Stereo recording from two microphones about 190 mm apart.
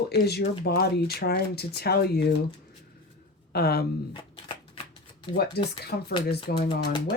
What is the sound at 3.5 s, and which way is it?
Speech, 55° left (ahead or behind).